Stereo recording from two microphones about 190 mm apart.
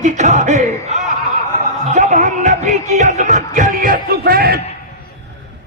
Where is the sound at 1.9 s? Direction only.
40° right (ahead or behind).